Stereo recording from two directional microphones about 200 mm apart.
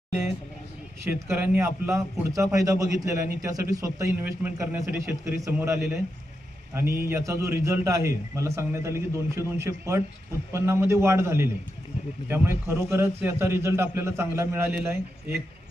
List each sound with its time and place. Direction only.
1.0 s a man's voice: 10° right (ahead or behind)